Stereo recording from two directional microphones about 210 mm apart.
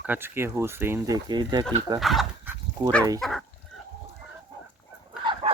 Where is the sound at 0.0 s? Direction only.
10° right (ahead or behind).